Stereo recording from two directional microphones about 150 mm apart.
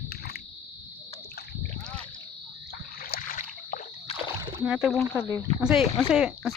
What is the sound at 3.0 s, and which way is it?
Rowboat, 70° left (ahead or behind).